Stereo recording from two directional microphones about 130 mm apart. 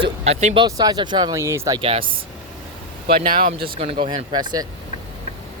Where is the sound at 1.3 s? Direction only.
20° right (ahead or behind).